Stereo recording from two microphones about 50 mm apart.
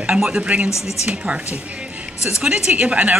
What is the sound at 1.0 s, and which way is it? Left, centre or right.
A woman's voice, right.